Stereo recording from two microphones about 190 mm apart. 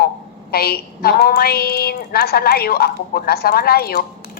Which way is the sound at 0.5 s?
55° left (ahead or behind).